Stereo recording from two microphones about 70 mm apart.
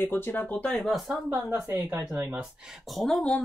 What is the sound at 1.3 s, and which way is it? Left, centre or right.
Speech, right.